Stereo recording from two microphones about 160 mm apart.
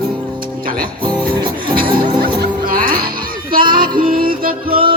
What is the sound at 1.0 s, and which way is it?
Music, 30° right (ahead or behind).